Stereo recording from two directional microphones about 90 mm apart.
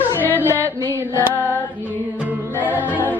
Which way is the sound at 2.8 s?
20° right (ahead or behind).